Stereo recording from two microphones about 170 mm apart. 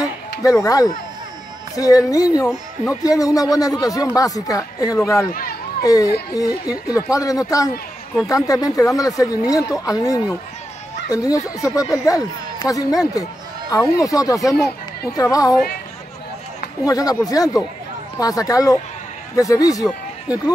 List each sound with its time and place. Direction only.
0.4 s speech: 20° left (ahead or behind)
2.5 s speech: 5° right (ahead or behind)
3.0 s speech: 20° left (ahead or behind)
8.7 s speech: 20° left (ahead or behind)
16.8 s speech: 20° left (ahead or behind)